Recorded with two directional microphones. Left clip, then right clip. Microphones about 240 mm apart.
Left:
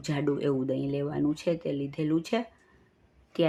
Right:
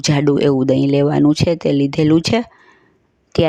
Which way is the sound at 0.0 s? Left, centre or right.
Right.